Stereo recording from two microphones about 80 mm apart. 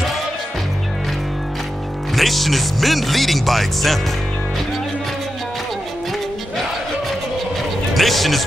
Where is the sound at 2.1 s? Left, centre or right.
Centre.